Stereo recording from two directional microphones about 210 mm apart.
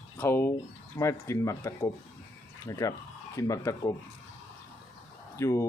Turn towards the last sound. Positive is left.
turn(degrees=15)  # may be behind; listen again after turning